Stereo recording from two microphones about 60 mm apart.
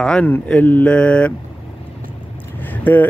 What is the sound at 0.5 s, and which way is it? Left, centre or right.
Speech, left.